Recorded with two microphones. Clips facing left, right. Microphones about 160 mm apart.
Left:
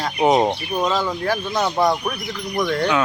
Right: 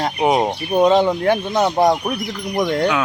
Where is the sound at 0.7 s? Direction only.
25° right (ahead or behind).